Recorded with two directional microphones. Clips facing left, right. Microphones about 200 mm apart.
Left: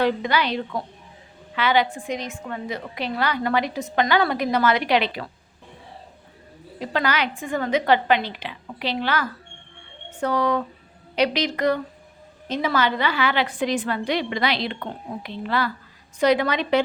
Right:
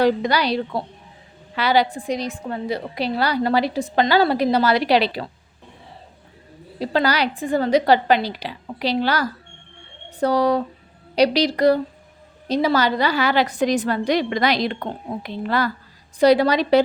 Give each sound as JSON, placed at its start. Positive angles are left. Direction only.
{"t": 0.0, "sound": "a woman's voice", "side_deg": -40}
{"t": 6.7, "sound": "a woman's voice", "side_deg": -35}